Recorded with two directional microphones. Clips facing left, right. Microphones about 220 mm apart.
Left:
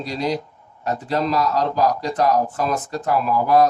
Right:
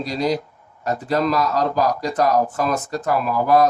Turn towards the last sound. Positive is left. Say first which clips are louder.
# even
turn(degrees=-45)  # may be behind; listen again after turning